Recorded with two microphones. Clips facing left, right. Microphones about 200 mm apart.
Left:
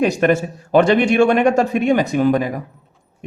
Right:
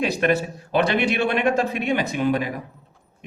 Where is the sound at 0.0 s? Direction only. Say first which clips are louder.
Left 5 dB; 45° left (ahead or behind).